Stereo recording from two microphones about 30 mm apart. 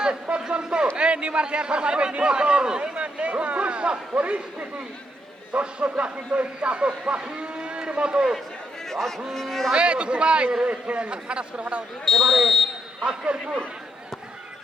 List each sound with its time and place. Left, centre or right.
0.3 s a sound: right
2.1 s a man's voice: right
3.0 s a man's voice: right
5.5 s a man's voice: right
9.0 s speech: centre
9.7 s a man's voice: right
12.0 s speech: centre
13.1 s a man's voice: right